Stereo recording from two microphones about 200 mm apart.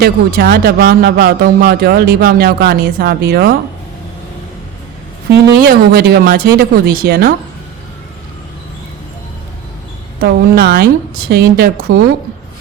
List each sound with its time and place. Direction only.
0.0 s speech: 50° right (ahead or behind)
5.3 s speech: 50° right (ahead or behind)
10.2 s speech: 50° right (ahead or behind)